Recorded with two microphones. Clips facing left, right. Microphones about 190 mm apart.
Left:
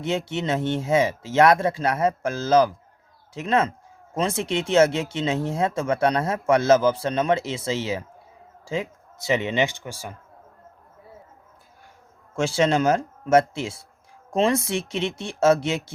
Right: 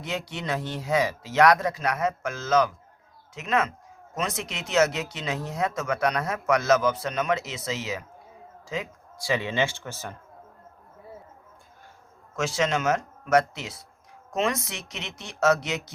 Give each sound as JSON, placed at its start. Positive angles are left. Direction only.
{"t": 0.0, "sound": "speech", "side_deg": 25}
{"t": 12.4, "sound": "speech", "side_deg": 30}